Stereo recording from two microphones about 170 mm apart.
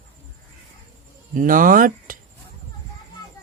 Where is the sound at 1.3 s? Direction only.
55° right (ahead or behind).